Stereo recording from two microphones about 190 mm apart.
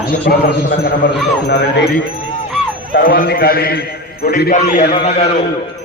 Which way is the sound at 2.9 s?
50° left (ahead or behind).